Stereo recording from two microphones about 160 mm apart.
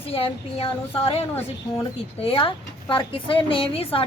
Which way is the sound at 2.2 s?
35° left (ahead or behind).